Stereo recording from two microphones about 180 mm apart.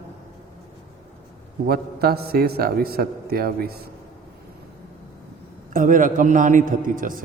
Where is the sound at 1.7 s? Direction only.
60° right (ahead or behind).